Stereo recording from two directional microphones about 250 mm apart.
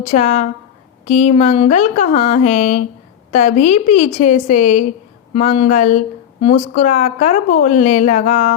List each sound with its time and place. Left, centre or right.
0.1 s a woman's voice: left